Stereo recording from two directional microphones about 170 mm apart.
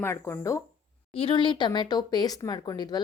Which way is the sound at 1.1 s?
35° left (ahead or behind).